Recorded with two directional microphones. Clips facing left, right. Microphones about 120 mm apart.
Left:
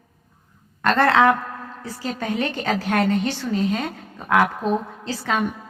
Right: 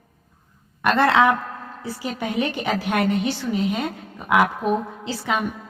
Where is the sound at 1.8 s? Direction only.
15° right (ahead or behind).